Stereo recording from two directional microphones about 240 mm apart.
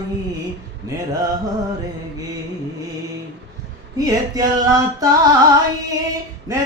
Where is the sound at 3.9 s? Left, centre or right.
Centre.